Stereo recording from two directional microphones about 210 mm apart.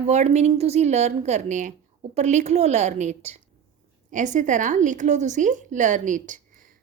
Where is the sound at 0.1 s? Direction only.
30° right (ahead or behind).